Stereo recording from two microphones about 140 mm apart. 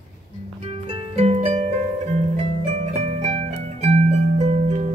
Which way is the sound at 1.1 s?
45° right (ahead or behind).